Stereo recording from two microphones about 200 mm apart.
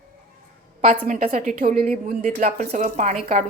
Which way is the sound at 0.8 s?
40° right (ahead or behind).